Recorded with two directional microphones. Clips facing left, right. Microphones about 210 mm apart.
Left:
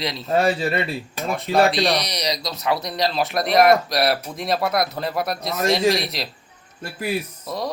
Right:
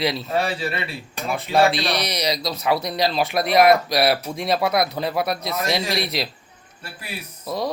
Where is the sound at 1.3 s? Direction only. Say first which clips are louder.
Even; centre (ahead or behind).